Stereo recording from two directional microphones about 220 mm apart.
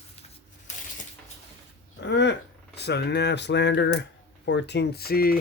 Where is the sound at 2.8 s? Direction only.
50° left (ahead or behind).